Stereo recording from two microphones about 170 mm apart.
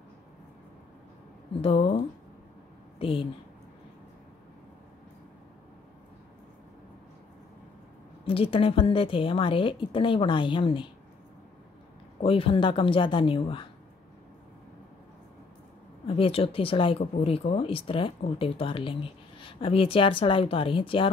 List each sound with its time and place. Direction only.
1.6 s speech: 35° left (ahead or behind)
3.0 s speech: 35° left (ahead or behind)
8.3 s speech: 30° left (ahead or behind)
12.2 s speech: 35° left (ahead or behind)
16.1 s speech: 35° left (ahead or behind)